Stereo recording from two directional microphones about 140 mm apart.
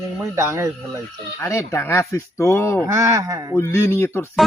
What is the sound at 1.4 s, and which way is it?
Speech, 20° left (ahead or behind).